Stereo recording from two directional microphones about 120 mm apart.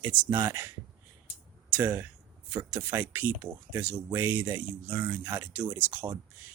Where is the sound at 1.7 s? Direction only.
15° right (ahead or behind).